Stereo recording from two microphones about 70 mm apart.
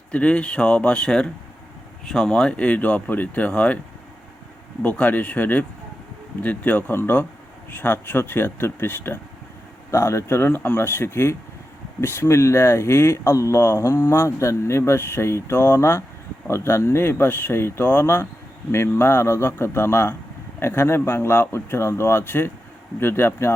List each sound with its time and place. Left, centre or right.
0.1 s speech: centre
4.8 s speech: left